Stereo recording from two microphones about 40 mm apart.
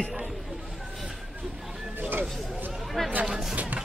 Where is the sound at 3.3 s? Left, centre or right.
Centre.